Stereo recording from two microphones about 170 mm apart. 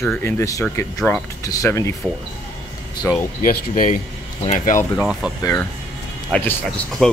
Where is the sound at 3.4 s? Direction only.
55° left (ahead or behind).